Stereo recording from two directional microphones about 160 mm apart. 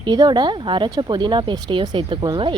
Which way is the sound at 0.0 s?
25° right (ahead or behind).